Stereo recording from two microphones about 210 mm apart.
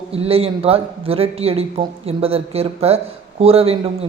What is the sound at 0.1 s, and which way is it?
A man's voice, 30° right (ahead or behind).